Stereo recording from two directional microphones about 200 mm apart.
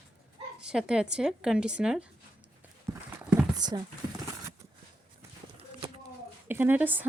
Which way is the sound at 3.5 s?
20° right (ahead or behind).